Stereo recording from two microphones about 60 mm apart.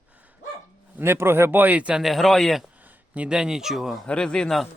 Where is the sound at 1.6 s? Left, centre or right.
Right.